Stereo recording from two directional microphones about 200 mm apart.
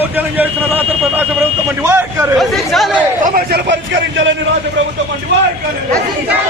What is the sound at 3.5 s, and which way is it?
Speech, 55° right (ahead or behind).